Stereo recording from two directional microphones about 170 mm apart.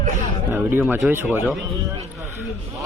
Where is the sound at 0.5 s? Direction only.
10° right (ahead or behind).